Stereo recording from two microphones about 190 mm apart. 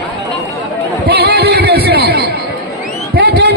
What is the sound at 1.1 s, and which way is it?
Music, 60° right (ahead or behind).